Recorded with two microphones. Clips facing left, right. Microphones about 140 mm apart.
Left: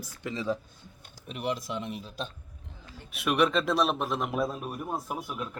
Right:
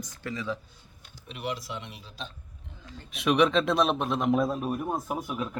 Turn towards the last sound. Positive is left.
turn(degrees=0)  # may be behind; listen again after turning